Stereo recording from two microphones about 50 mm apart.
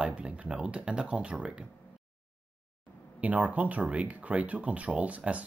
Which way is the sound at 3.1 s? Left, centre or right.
Right.